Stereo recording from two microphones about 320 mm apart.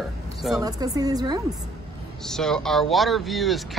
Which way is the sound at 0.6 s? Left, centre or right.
Centre.